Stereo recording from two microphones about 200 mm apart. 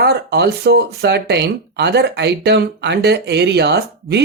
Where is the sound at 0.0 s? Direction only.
55° right (ahead or behind).